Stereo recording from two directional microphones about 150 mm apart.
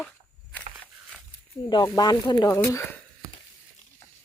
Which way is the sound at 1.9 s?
25° left (ahead or behind).